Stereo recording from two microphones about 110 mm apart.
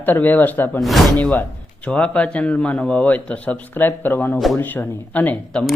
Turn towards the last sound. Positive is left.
turn(degrees=10)  # may be behind; listen again after turning